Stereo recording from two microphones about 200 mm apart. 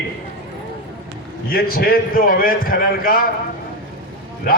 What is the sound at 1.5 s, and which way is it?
A man's voice, 50° left (ahead or behind).